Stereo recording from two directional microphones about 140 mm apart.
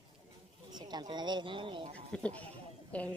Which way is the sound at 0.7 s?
30° right (ahead or behind).